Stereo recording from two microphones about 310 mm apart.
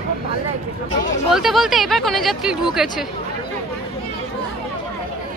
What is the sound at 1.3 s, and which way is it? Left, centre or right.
Speech, centre.